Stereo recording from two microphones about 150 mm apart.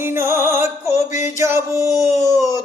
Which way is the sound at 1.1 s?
55° left (ahead or behind).